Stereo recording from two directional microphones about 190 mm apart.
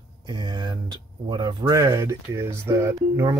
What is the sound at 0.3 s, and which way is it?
Speech, 25° right (ahead or behind).